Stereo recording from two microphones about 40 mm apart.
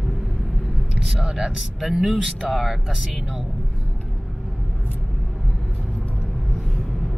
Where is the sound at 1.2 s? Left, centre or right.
Centre.